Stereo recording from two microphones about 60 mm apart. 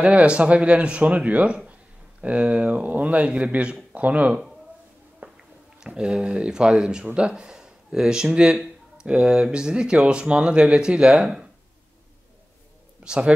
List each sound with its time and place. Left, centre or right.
0.0 s speech: centre
2.7 s speech: right
5.2 s a sound: right
5.8 s speech: centre
8.9 s a sound: centre
9.4 s speech: centre
11.1 s speech: centre
13.0 s speech: centre